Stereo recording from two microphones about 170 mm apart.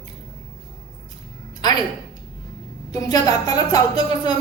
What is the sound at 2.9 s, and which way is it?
A woman's voice, 20° left (ahead or behind).